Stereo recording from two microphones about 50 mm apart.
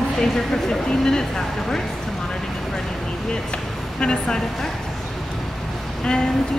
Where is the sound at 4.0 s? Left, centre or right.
Centre.